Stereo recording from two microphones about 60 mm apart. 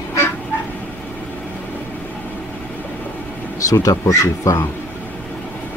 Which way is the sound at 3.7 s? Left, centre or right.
Left.